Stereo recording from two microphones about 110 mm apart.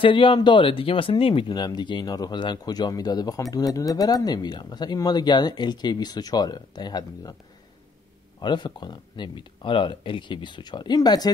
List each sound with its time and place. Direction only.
0.0 s speech: 50° left (ahead or behind)
1.5 s speech: 40° left (ahead or behind)
8.4 s speech: 45° left (ahead or behind)